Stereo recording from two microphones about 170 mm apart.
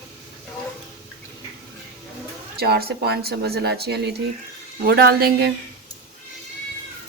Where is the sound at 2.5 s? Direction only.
65° right (ahead or behind).